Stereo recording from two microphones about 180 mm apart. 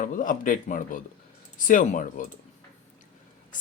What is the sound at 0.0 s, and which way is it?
Speech, 45° left (ahead or behind).